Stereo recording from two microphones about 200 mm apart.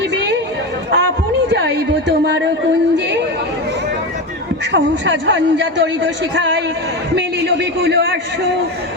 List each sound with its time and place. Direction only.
0.1 s a sound: 60° right (ahead or behind)
4.7 s a man's voice: 65° right (ahead or behind)
7.3 s a man's voice: 60° right (ahead or behind)